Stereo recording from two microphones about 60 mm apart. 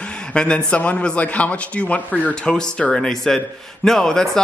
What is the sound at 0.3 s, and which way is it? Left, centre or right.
A man's voice, centre.